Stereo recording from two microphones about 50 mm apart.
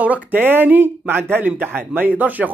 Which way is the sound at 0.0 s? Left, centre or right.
Right.